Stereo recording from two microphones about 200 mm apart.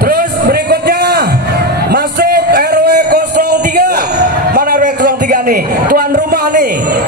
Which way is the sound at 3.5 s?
50° right (ahead or behind).